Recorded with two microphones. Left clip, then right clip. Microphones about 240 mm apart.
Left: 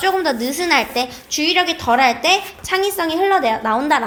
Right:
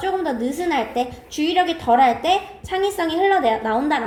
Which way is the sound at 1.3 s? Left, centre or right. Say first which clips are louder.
Left 3 dB; left.